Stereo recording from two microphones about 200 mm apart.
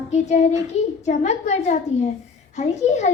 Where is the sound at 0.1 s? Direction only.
35° left (ahead or behind).